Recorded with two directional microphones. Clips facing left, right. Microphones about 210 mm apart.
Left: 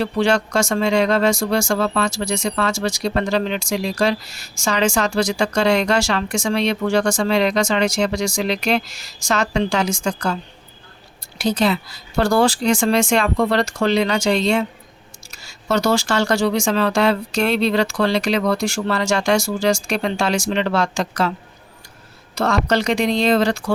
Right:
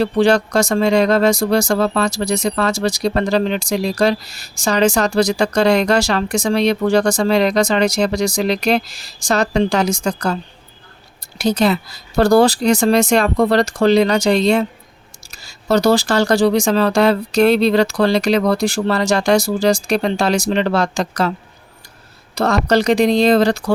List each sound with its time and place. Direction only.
0.0 s speech: 35° right (ahead or behind)
11.3 s speech: 40° right (ahead or behind)
22.4 s speech: 35° right (ahead or behind)